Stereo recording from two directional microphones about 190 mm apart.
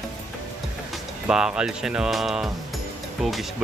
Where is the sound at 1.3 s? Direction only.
5° right (ahead or behind).